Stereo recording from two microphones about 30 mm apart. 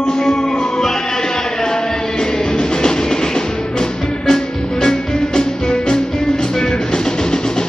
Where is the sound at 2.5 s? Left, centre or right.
Left.